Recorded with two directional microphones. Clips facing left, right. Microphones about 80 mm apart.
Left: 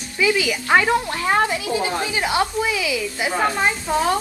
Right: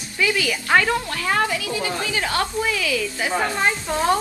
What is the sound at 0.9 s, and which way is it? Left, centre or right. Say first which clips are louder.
Speech: left 3 dB; left.